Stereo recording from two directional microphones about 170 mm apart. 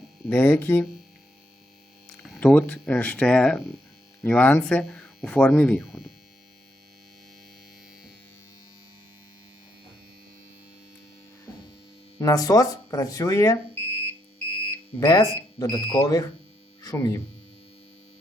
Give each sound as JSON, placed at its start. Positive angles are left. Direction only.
{"t": 0.3, "sound": "speech", "side_deg": 10}
{"t": 2.2, "sound": "speech", "side_deg": 5}
{"t": 12.2, "sound": "speech", "side_deg": 20}